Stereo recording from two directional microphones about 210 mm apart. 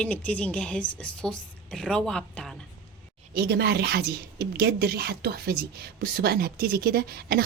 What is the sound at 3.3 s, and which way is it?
Speech, 50° right (ahead or behind).